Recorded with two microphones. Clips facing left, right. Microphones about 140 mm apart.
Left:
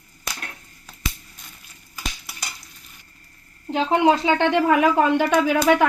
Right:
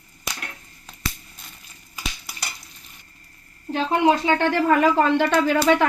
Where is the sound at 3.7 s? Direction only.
20° left (ahead or behind).